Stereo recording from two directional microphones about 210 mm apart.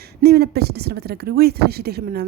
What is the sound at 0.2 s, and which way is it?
A woman's voice, 50° right (ahead or behind).